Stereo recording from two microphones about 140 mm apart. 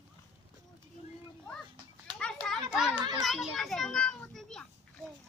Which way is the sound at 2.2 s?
Centre (ahead or behind).